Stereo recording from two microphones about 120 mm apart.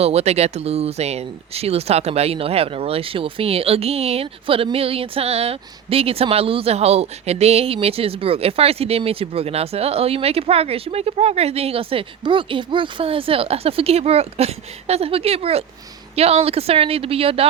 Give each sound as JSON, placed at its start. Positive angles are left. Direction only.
{"t": 0.0, "sound": "speech", "side_deg": -60}